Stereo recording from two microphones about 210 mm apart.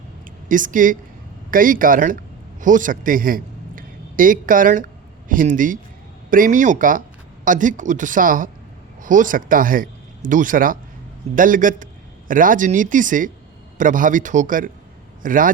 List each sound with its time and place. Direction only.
0.4 s a man's voice: 40° right (ahead or behind)